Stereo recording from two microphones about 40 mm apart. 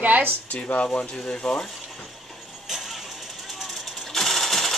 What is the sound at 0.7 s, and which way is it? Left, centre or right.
Speech, left.